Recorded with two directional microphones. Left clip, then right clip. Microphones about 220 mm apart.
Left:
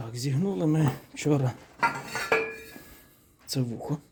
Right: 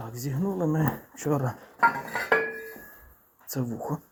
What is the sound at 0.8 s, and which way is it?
Speech, 40° left (ahead or behind).